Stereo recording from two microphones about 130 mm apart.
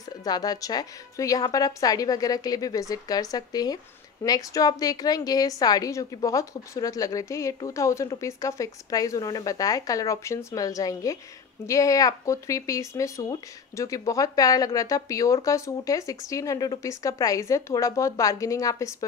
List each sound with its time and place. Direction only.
0.2 s a woman's voice: 30° left (ahead or behind)